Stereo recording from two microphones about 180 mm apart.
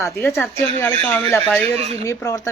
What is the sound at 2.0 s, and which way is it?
Speech, 15° left (ahead or behind).